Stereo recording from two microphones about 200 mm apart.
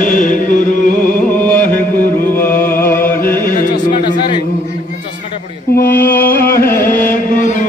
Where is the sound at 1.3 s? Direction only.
10° left (ahead or behind).